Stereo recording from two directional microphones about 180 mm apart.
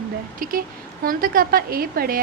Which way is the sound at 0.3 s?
50° right (ahead or behind).